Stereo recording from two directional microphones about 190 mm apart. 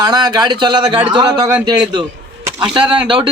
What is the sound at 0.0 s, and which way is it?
Speech, 20° right (ahead or behind).